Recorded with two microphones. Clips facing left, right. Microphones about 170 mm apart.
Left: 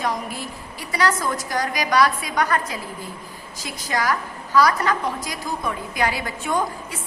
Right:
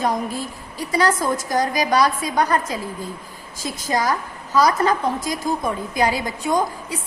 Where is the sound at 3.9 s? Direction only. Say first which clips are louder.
Right 2 dB; 20° right (ahead or behind).